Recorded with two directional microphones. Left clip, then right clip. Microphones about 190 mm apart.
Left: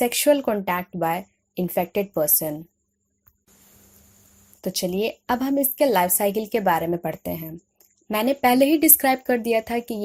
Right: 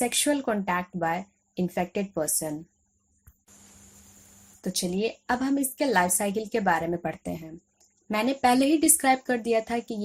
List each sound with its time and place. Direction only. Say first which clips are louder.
0.0 s a woman's voice: left 7 dB; 35° left (ahead or behind)
4.6 s a woman's voice: left 4 dB; 35° left (ahead or behind)